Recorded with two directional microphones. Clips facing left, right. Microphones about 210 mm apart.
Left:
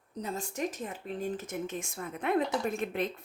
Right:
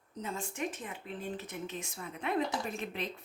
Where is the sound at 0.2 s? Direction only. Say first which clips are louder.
Left 3 dB; 40° left (ahead or behind).